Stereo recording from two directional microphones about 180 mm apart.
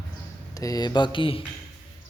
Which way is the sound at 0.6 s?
20° left (ahead or behind).